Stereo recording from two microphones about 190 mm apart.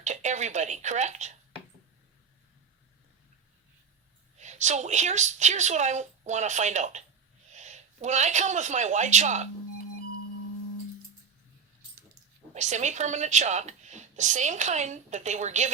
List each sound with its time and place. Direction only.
0.0 s speech: 40° right (ahead or behind)
4.4 s a woman's voice: 40° right (ahead or behind)
12.5 s a woman's voice: 40° right (ahead or behind)